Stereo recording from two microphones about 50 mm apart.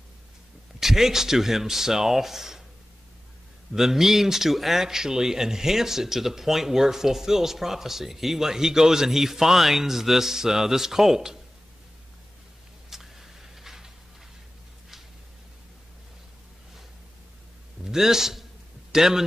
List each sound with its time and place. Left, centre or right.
0.7 s speech: centre
3.7 s speech: centre
12.9 s a sound: centre
17.8 s a man's voice: centre